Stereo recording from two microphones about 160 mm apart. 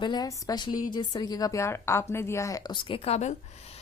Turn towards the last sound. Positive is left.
turn(degrees=45)  # may be behind; listen again after turning